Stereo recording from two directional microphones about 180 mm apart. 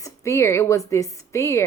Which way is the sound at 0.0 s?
15° left (ahead or behind).